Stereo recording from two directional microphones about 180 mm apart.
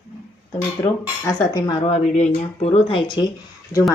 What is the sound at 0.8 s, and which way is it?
Speech, 20° left (ahead or behind).